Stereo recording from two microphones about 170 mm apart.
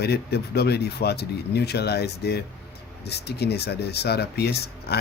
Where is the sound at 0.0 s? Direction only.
70° left (ahead or behind).